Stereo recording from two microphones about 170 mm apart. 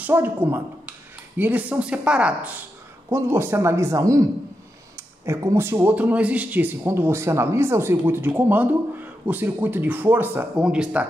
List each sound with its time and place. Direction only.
0.0 s speech: 10° right (ahead or behind)